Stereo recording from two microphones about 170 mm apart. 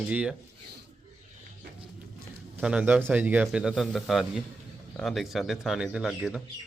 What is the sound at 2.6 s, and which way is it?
Speech, 5° right (ahead or behind).